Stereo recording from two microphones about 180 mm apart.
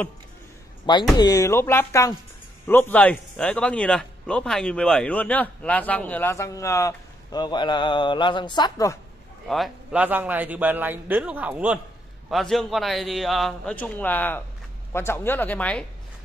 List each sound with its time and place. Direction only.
1.1 s a man's voice: 20° left (ahead or behind)
9.5 s a man's voice: 5° right (ahead or behind)